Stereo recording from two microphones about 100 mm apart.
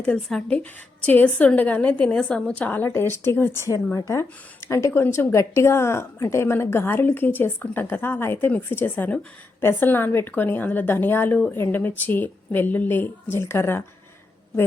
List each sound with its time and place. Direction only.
0.0 s a woman's voice: 10° left (ahead or behind); by 13.8 s 25° left (ahead or behind)